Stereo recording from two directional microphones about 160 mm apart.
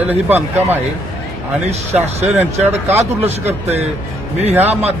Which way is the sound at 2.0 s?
10° right (ahead or behind).